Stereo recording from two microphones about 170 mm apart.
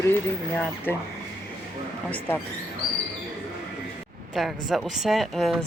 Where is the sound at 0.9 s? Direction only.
10° left (ahead or behind).